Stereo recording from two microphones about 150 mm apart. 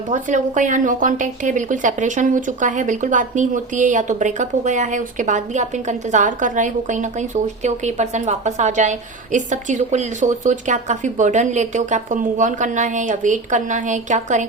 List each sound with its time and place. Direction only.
0.1 s a woman's voice: 55° right (ahead or behind)